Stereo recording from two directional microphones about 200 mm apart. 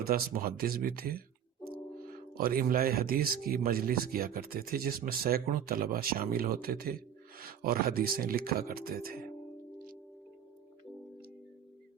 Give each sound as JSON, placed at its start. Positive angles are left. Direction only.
{"t": 0.0, "sound": "speech", "side_deg": -50}
{"t": 2.3, "sound": "speech", "side_deg": -45}
{"t": 9.7, "sound": "music", "side_deg": -45}